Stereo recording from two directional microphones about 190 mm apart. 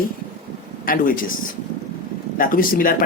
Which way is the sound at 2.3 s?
45° left (ahead or behind).